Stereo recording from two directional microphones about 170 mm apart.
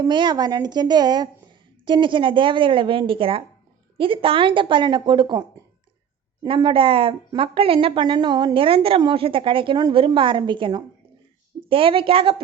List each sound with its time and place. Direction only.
0.0 s a woman's voice: 25° right (ahead or behind)